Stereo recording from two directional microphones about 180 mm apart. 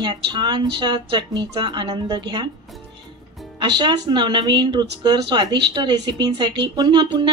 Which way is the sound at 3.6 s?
25° right (ahead or behind).